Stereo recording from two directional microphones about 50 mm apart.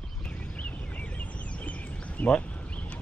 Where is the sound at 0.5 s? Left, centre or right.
Left.